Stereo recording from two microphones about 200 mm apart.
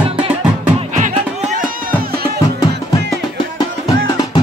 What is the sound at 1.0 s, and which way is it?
Music, 40° right (ahead or behind).